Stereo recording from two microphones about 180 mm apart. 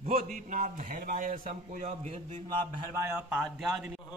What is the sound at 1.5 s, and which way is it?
Speech, 40° right (ahead or behind).